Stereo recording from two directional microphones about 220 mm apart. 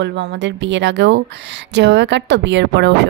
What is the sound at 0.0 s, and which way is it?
Speech, 55° right (ahead or behind).